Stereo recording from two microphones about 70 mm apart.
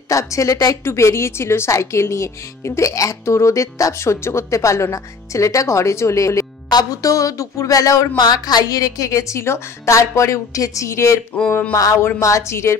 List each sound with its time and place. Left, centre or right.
0.1 s speech: left
0.8 s speech: left
6.7 s speech: left
8.2 s speech: left
9.4 s speech: left